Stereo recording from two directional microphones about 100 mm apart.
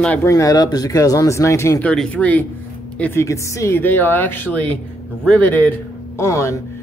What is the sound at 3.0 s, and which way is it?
Speech, 25° left (ahead or behind).